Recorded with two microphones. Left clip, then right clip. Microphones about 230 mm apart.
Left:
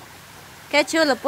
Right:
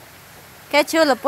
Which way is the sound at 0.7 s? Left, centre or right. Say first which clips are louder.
Right 2 dB; centre.